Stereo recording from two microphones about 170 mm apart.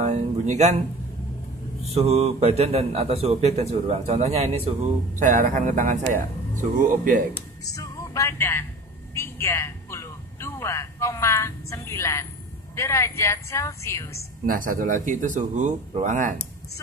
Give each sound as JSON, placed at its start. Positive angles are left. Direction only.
{"t": 0.0, "sound": "music", "side_deg": -40}
{"t": 1.9, "sound": "a man's voice", "side_deg": -40}
{"t": 5.2, "sound": "speech", "side_deg": -50}
{"t": 7.6, "sound": "speech", "side_deg": 20}
{"t": 9.1, "sound": "a sound", "side_deg": 15}
{"t": 12.7, "sound": "a woman's voice", "side_deg": 15}
{"t": 14.4, "sound": "speech", "side_deg": -55}